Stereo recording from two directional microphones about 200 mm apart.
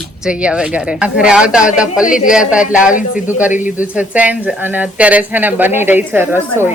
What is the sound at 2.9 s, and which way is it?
Speech, 40° left (ahead or behind).